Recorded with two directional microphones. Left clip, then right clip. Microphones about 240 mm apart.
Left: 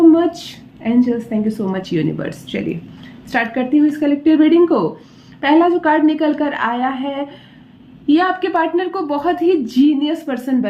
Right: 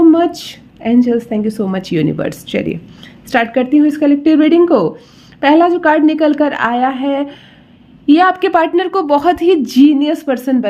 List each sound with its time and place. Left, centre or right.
0.1 s a woman's voice: right